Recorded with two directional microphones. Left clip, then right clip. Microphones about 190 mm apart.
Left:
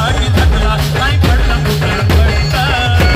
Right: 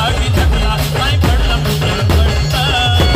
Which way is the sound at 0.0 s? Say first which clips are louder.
Left 1 dB; 50° right (ahead or behind).